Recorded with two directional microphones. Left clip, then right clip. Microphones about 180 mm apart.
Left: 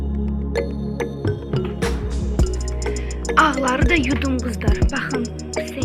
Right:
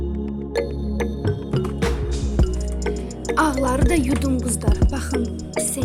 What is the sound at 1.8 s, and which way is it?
Music, centre (ahead or behind).